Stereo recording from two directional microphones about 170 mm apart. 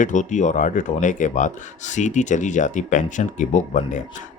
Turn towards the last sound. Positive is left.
turn(degrees=45)  # may be behind; listen again after turning